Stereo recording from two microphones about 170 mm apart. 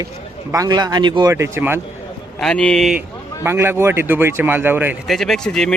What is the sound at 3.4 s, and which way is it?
A man's voice, 15° right (ahead or behind).